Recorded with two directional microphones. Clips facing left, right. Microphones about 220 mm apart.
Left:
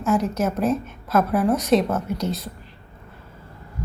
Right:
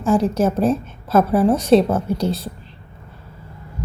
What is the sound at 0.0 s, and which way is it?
A woman's voice, 30° right (ahead or behind).